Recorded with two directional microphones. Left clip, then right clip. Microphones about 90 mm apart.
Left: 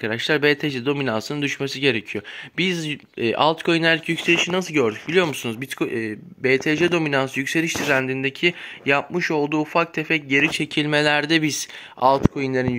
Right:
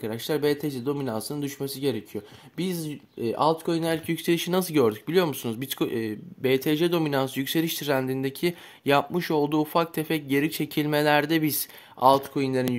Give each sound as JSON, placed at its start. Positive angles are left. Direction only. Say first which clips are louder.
{"t": 0.0, "sound": "speech", "louder": "left 7 dB", "side_deg": 0}
{"t": 1.6, "sound": "speech", "louder": "left 7 dB", "side_deg": 50}
{"t": 3.2, "sound": "speech", "louder": "left 4 dB", "side_deg": 60}
{"t": 3.9, "sound": "speech", "louder": "left 7 dB", "side_deg": 0}
{"t": 4.3, "sound": "speech", "louder": "left 5 dB", "side_deg": -20}
{"t": 5.0, "sound": "speech", "louder": "left 4 dB", "side_deg": 0}
{"t": 10.5, "sound": "speech", "louder": "left 5 dB", "side_deg": 5}